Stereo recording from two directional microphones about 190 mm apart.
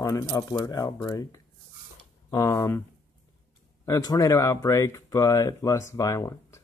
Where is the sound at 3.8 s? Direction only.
20° left (ahead or behind).